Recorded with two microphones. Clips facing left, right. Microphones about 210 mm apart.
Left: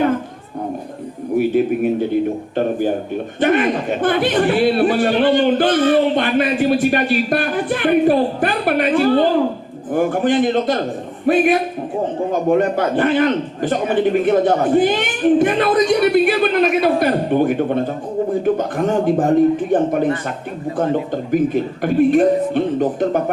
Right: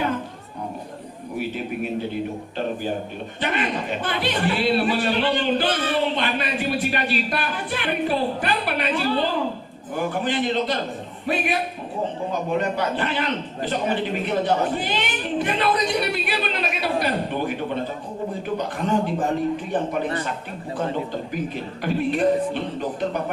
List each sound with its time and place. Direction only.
2.6 s a man's voice: 50° left (ahead or behind)
21.2 s a man's voice: 50° left (ahead or behind)